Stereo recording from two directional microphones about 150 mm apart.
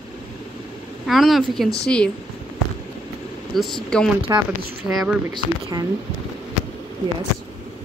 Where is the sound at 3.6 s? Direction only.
Centre (ahead or behind).